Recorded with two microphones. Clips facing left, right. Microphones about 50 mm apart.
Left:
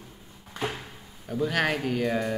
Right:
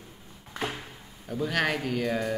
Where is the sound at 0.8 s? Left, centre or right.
Centre.